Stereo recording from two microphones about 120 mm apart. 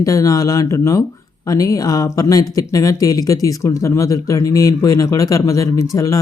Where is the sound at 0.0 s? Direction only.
30° left (ahead or behind).